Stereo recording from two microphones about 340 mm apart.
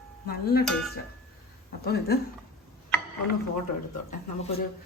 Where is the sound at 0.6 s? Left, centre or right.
Centre.